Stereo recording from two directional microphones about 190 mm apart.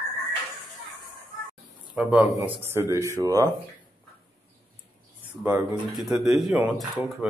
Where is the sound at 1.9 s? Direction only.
Centre (ahead or behind); by 3.5 s 15° right (ahead or behind).